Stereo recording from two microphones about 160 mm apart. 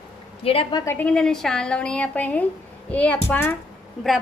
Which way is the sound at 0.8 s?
15° left (ahead or behind).